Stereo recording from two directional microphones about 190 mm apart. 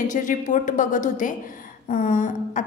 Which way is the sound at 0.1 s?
40° left (ahead or behind).